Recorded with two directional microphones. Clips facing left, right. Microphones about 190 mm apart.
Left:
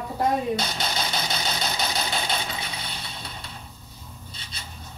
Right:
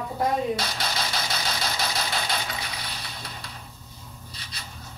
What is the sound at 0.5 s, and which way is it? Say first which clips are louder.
Engine: left 1 dB; 20° left (ahead or behind).